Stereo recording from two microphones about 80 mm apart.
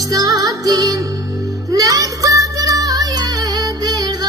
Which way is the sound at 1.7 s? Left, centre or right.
Right.